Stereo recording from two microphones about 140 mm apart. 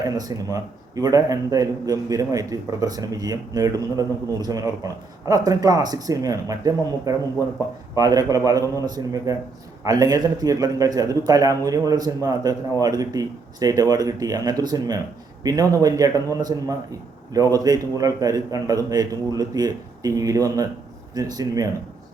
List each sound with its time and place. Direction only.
0.0 s a man's voice: 25° right (ahead or behind)